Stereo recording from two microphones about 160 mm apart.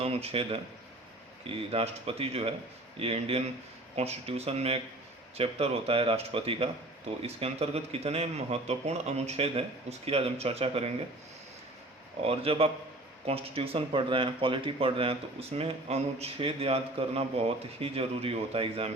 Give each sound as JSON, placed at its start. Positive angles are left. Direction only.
{"t": 0.0, "sound": "speech", "side_deg": -40}
{"t": 12.2, "sound": "speech", "side_deg": -35}